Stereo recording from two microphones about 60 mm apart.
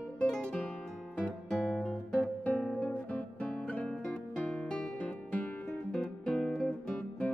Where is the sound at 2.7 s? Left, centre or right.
Left.